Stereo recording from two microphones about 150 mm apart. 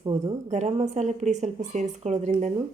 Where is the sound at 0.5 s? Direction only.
50° right (ahead or behind).